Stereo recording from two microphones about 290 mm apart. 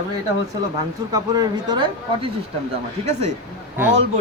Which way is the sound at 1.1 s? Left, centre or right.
Centre.